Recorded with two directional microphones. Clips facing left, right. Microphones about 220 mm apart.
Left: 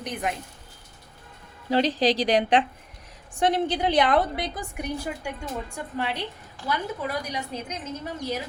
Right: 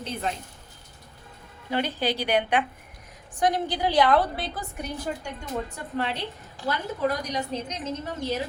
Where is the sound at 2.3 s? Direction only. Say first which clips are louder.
Left 3 dB; 35° left (ahead or behind); by 5.3 s 10° left (ahead or behind).